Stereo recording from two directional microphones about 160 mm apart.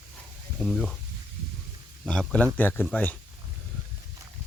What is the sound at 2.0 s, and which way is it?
Speech, 5° left (ahead or behind).